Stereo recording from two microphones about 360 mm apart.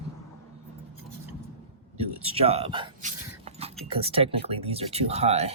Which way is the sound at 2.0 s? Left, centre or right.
Centre.